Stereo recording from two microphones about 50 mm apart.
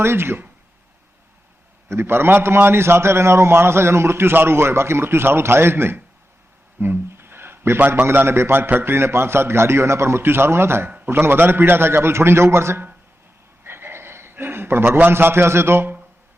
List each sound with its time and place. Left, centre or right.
0.0 s a man's voice: right
1.9 s a man's voice: right
6.7 s a sound: right
8.1 s a man's voice: right
10.8 s a sound: right
11.1 s a man's voice: right
11.9 s a man's voice: right
13.7 s a sound: right
15.1 s a man's voice: right